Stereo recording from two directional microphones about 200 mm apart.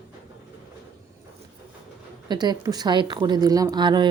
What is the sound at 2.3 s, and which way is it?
A woman's voice, 20° right (ahead or behind).